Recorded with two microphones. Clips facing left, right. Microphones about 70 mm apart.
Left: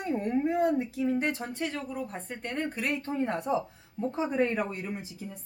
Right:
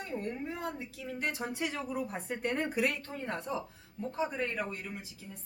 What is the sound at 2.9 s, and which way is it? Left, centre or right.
Speech, left.